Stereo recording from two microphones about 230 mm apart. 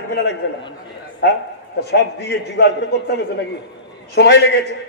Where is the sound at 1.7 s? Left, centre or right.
Left.